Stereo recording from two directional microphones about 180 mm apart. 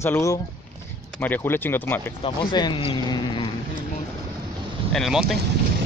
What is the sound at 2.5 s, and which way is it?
Speech, 25° left (ahead or behind).